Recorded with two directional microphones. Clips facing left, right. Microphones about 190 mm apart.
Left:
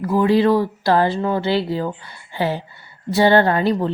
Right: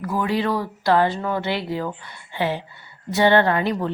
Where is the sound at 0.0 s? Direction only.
30° left (ahead or behind).